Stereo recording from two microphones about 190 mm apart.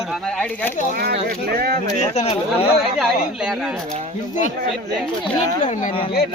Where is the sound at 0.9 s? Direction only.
55° right (ahead or behind).